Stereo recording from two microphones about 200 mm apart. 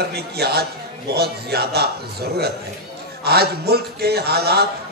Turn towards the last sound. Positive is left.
turn(degrees=-55)  # may be behind; listen again after turning